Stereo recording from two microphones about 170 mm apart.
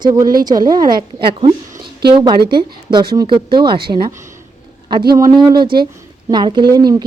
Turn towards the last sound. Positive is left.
turn(degrees=-25)  # may be behind; listen again after turning